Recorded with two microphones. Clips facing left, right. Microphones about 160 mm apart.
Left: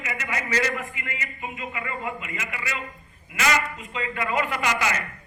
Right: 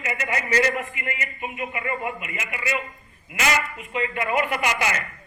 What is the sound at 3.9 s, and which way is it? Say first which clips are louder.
Speech: right 3 dB; 20° right (ahead or behind).